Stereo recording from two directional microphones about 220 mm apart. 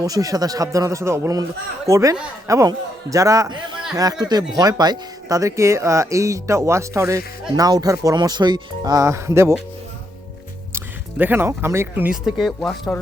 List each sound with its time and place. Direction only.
0.0 s speech: 15° right (ahead or behind)
10.7 s speech: 10° right (ahead or behind)